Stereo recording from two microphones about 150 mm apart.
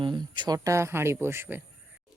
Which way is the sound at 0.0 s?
30° right (ahead or behind).